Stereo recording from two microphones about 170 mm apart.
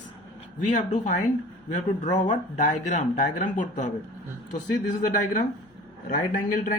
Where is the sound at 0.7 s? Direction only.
45° left (ahead or behind).